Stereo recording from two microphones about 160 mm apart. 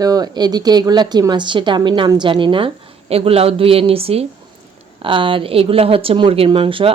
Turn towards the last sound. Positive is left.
turn(degrees=-35)  # may be behind; listen again after turning